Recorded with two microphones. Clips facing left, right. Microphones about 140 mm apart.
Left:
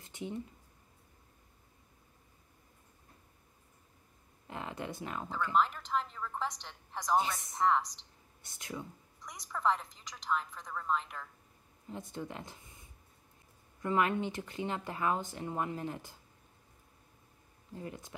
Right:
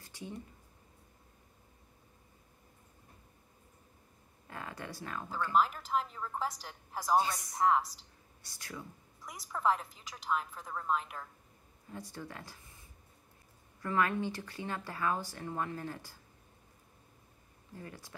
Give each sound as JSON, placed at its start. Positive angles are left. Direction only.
{"t": 0.0, "sound": "a sound", "side_deg": 20}
{"t": 4.5, "sound": "speech", "side_deg": 20}
{"t": 5.5, "sound": "a woman's voice", "side_deg": -5}
{"t": 8.4, "sound": "speech", "side_deg": 20}
{"t": 9.2, "sound": "a woman's voice", "side_deg": -5}
{"t": 11.9, "sound": "speech", "side_deg": 20}
{"t": 13.8, "sound": "speech", "side_deg": 20}
{"t": 17.7, "sound": "speech", "side_deg": 20}